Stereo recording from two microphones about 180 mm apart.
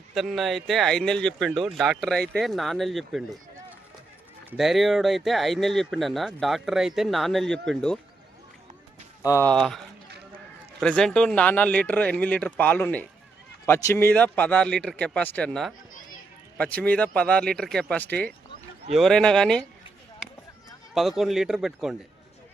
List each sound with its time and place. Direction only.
0.1 s speech: centre (ahead or behind)
4.5 s speech: centre (ahead or behind)
9.2 s speech: 15° left (ahead or behind)
9.5 s speech: centre (ahead or behind)
20.9 s speech: centre (ahead or behind)